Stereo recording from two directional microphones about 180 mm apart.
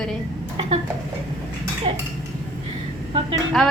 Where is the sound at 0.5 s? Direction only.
35° right (ahead or behind).